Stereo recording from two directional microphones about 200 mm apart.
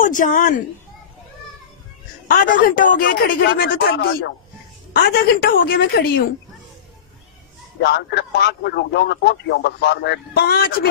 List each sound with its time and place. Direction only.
0.0 s a man's voice: 40° left (ahead or behind)
2.2 s a man's voice: 45° left (ahead or behind)
3.2 s a woman's voice: 55° left (ahead or behind)
7.8 s a man's voice: 55° left (ahead or behind)